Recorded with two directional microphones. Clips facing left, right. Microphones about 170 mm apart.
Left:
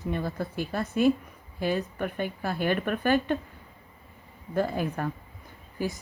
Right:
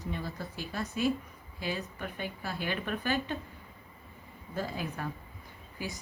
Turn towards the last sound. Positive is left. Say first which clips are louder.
# left 8 dB
turn(degrees=45)  # may be behind; listen again after turning